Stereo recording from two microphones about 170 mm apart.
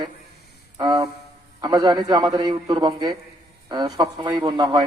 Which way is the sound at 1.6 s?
25° right (ahead or behind).